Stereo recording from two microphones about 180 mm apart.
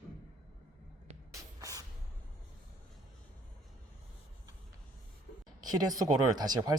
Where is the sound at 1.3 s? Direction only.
20° right (ahead or behind).